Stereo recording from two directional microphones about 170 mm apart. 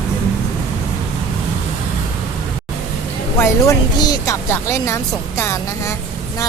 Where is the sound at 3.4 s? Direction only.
20° left (ahead or behind).